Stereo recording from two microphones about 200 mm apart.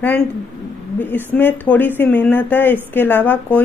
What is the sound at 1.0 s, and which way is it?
A woman's voice, 10° left (ahead or behind).